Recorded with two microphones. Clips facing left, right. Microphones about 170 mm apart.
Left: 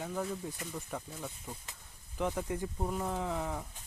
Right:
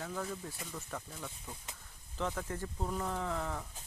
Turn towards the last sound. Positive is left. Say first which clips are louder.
# left 2 dB
turn(degrees=15)  # may be behind; listen again after turning